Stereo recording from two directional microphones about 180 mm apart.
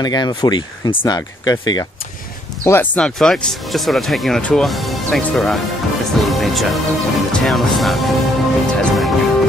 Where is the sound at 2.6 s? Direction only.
10° left (ahead or behind).